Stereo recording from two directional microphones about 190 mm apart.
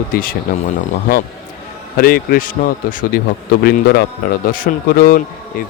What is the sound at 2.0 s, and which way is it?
Speech, 50° left (ahead or behind).